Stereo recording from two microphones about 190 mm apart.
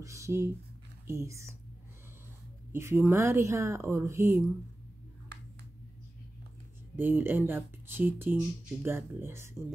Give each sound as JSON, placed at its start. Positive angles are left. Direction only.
{"t": 0.0, "sound": "a woman's voice", "side_deg": -15}
{"t": 2.7, "sound": "a woman's voice", "side_deg": -15}
{"t": 7.0, "sound": "a woman's voice", "side_deg": -10}